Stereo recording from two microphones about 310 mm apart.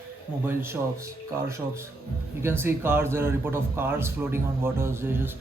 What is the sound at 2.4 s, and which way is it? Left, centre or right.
A man's voice, centre.